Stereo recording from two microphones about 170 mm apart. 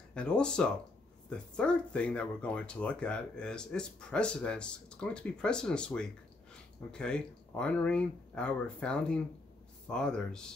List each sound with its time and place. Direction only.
0.1 s speech: 5° left (ahead or behind)